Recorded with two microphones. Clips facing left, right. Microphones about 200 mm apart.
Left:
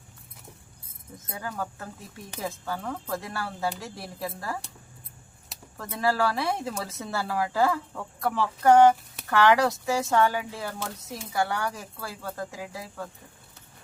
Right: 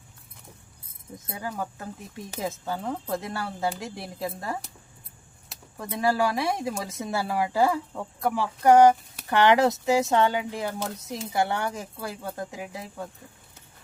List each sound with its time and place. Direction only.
1.3 s speech: 20° right (ahead or behind)
5.7 s speech: 15° right (ahead or behind)